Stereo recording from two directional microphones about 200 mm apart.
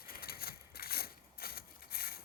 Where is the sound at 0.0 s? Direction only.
50° left (ahead or behind).